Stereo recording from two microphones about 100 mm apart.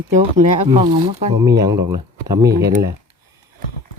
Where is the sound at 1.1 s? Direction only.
90° right.